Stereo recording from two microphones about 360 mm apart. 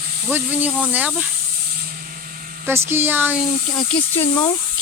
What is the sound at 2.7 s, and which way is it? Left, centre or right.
Speech, centre.